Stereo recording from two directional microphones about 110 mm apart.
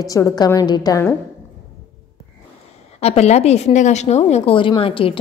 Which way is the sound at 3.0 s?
80° left.